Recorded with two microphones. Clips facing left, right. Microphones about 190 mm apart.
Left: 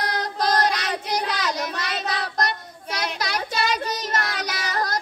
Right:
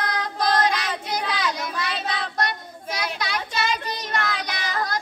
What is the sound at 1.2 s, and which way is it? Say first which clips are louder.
Child singing: even; 45° left (ahead or behind).